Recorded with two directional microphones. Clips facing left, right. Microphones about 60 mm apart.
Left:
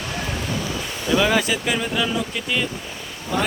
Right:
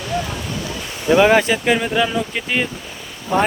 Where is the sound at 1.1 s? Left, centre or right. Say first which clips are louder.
Right 6 dB; right.